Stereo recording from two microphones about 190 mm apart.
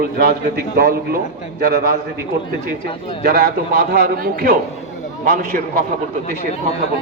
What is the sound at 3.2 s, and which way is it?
A man's voice, 55° right (ahead or behind).